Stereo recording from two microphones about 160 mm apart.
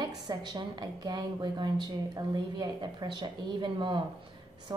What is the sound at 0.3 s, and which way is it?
A woman's voice, 25° right (ahead or behind).